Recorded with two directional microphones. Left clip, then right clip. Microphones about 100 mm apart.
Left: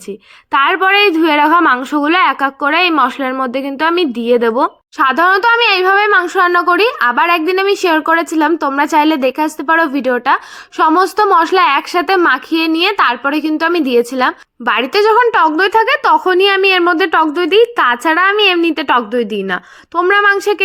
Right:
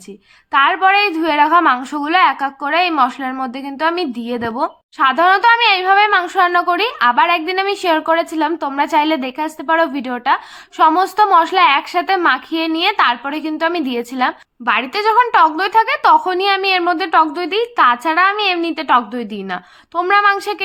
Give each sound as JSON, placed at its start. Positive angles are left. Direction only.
{"t": 0.5, "sound": "speech", "side_deg": 45}
{"t": 4.9, "sound": "speech", "side_deg": 60}
{"t": 14.6, "sound": "a woman's voice", "side_deg": 90}
{"t": 15.3, "sound": "speech", "side_deg": 50}